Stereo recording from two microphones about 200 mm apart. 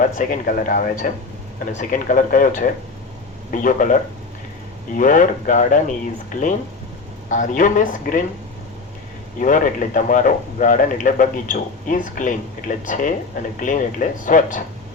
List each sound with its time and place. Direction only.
0.2 s a man's voice: 45° left (ahead or behind)
7.3 s a man's voice: 40° left (ahead or behind)
9.4 s a man's voice: 40° left (ahead or behind)